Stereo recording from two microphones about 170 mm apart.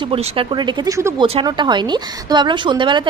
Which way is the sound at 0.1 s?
30° right (ahead or behind).